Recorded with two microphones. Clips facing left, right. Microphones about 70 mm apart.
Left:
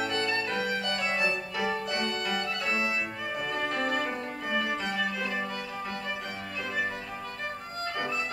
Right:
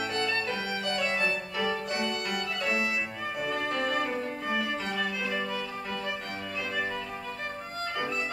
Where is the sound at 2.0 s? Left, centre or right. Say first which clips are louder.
Left 1 dB; centre.